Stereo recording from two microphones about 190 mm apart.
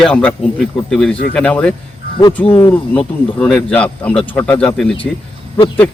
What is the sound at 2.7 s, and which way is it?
Speech, 5° left (ahead or behind).